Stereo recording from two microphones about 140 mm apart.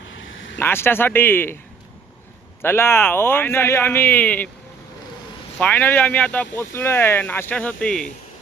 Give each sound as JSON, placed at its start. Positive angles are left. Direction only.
{"t": 0.6, "sound": "speech", "side_deg": 15}
{"t": 2.6, "sound": "speech", "side_deg": 15}
{"t": 5.5, "sound": "speech", "side_deg": 10}